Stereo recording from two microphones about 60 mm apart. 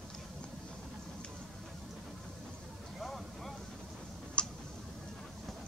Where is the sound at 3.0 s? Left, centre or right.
Centre.